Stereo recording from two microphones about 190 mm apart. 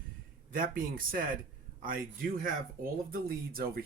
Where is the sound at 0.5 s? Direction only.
45° right (ahead or behind).